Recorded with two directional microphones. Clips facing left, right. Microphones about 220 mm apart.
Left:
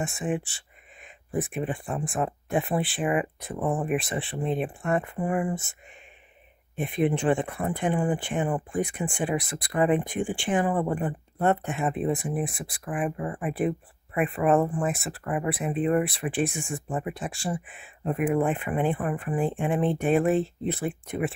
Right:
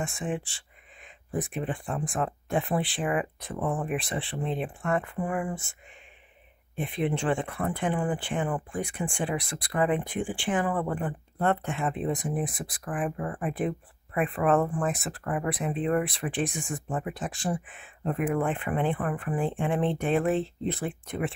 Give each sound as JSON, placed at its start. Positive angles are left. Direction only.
{"t": 0.1, "sound": "speech", "side_deg": 15}
{"t": 6.9, "sound": "speech", "side_deg": 15}